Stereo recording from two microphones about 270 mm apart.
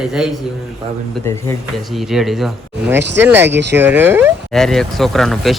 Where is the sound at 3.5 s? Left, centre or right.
Right.